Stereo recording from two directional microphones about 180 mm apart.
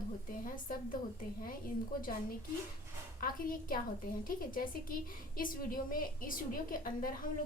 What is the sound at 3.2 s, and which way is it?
A woman's voice, 50° left (ahead or behind).